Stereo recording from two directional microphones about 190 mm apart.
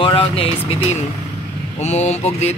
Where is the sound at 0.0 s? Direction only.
30° left (ahead or behind).